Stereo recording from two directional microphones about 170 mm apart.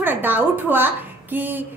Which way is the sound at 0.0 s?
10° right (ahead or behind).